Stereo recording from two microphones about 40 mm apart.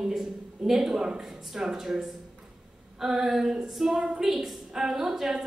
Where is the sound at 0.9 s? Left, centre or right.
Centre.